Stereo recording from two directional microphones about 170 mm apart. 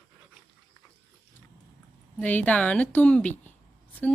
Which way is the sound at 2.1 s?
10° left (ahead or behind).